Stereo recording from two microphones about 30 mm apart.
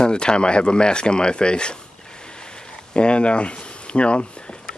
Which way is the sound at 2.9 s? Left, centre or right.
Left.